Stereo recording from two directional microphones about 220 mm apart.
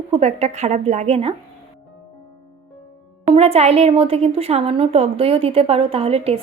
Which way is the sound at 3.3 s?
25° right (ahead or behind).